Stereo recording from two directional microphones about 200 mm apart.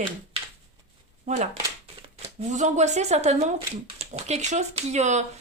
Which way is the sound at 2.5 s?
35° right (ahead or behind).